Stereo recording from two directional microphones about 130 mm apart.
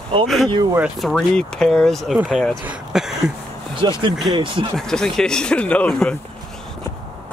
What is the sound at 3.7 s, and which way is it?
Speech, 40° right (ahead or behind).